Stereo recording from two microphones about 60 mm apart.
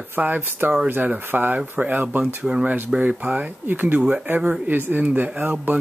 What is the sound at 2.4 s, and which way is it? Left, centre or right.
Speech, centre.